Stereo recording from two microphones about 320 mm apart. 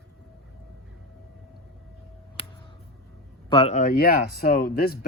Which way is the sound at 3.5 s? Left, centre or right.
Centre.